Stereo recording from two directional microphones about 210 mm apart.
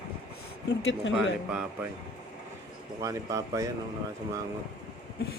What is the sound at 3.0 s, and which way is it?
Speech, 15° right (ahead or behind).